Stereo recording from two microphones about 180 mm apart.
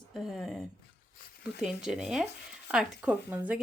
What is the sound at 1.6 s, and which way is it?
A woman's voice, 5° right (ahead or behind).